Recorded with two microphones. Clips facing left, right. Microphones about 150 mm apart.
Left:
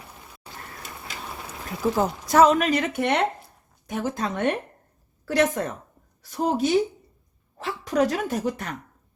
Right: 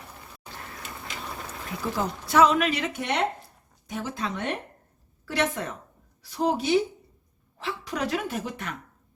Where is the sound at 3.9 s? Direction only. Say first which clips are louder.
Left 4 dB; 45° left (ahead or behind).